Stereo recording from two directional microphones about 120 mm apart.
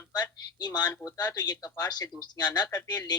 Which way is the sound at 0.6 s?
35° left (ahead or behind).